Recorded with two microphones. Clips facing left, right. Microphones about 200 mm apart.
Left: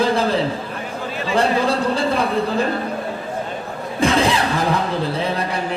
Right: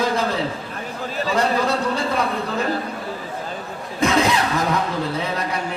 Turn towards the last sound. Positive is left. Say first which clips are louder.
# left 2 dB
turn(degrees=30)  # may be behind; listen again after turning